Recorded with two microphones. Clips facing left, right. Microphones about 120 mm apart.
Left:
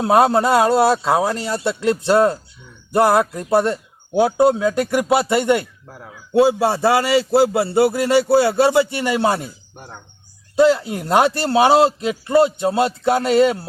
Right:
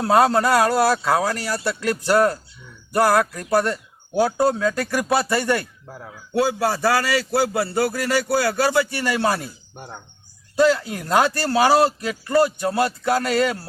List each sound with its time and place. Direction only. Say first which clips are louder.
0.0 s a man's voice: left 2 dB; 20° left (ahead or behind)
5.9 s speech: right 1 dB; centre (ahead or behind)
6.3 s a man's voice: left 6 dB; 25° left (ahead or behind)
10.5 s a man's voice: left 3 dB; 20° left (ahead or behind)